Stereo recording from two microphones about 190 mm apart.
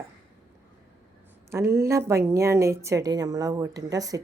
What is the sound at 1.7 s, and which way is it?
A woman's voice, 15° right (ahead or behind).